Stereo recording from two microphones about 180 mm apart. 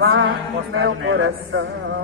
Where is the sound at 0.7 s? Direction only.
90° right.